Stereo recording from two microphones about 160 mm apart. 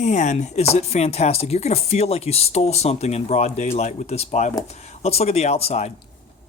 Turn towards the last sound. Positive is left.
turn(degrees=40)  # may be behind; listen again after turning